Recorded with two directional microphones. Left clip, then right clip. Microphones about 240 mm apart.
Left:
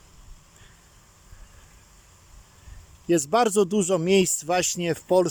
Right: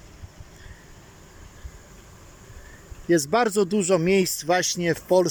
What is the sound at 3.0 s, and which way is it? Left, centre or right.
Speech, centre.